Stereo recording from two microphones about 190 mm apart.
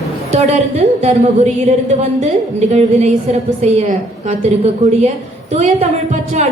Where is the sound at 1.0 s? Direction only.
35° right (ahead or behind).